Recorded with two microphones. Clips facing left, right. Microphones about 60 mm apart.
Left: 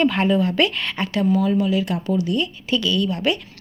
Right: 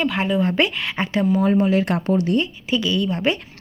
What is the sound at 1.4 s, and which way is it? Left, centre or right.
Speech, right.